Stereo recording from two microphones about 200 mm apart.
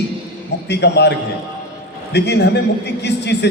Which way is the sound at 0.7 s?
55° left (ahead or behind).